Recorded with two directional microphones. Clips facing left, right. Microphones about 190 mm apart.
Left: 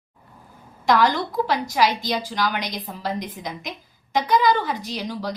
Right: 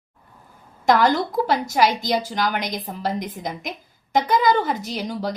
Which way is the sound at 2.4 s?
50° right (ahead or behind).